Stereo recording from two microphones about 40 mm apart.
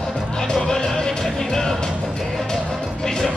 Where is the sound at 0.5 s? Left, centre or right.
Centre.